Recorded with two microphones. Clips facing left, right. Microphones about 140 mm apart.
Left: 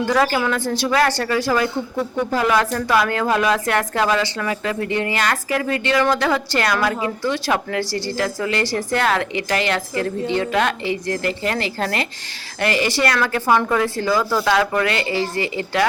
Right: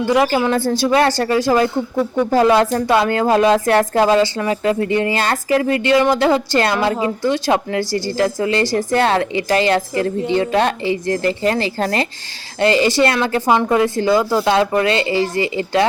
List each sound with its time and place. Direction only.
0.0 s a woman's voice: 20° right (ahead or behind)